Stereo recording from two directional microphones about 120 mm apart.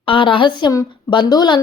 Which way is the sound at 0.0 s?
45° left (ahead or behind).